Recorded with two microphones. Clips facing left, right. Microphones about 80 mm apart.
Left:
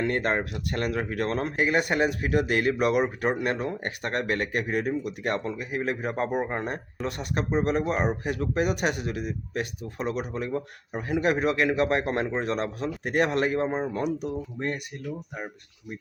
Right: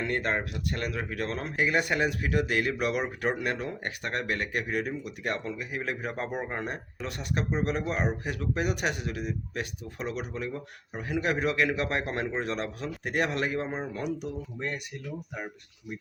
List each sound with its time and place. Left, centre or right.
0.0 s speech: left
13.7 s speech: centre
13.9 s speech: left